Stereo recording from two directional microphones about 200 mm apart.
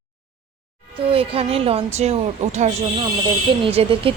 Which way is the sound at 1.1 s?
30° right (ahead or behind).